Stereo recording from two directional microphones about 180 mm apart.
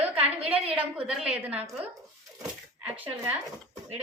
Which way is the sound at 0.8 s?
5° right (ahead or behind).